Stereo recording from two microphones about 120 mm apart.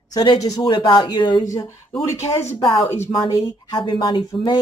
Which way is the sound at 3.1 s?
30° left (ahead or behind).